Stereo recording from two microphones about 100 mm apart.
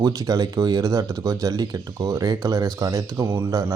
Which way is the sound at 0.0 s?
40° right (ahead or behind).